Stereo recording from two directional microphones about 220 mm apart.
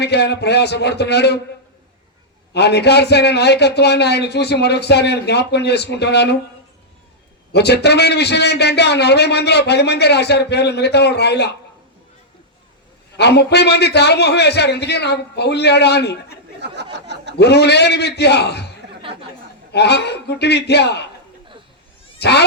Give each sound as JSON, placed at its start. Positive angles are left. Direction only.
{"t": 0.0, "sound": "a man's voice", "side_deg": 50}
{"t": 2.5, "sound": "a man's voice", "side_deg": 50}
{"t": 7.5, "sound": "a man's voice", "side_deg": 50}
{"t": 13.1, "sound": "a man's voice", "side_deg": 50}
{"t": 16.6, "sound": "a sound", "side_deg": -50}
{"t": 17.3, "sound": "a man's voice", "side_deg": 50}
{"t": 19.7, "sound": "a man's voice", "side_deg": 50}
{"t": 22.2, "sound": "speech", "side_deg": 50}